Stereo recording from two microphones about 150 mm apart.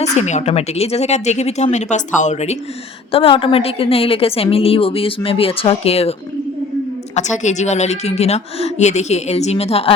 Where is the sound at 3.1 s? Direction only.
40° left (ahead or behind).